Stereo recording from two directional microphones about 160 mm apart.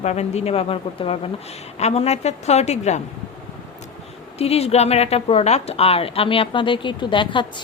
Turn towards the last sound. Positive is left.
turn(degrees=30)  # may be behind; listen again after turning